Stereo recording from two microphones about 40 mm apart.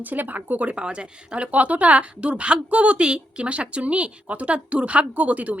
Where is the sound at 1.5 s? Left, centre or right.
Right.